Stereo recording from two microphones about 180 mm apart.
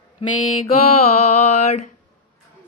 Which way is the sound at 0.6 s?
35° left (ahead or behind).